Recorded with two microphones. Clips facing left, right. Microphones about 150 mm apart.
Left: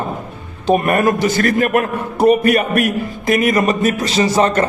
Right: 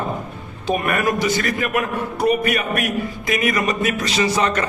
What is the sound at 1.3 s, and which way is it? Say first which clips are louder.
Speech: left 7 dB; 55° left (ahead or behind).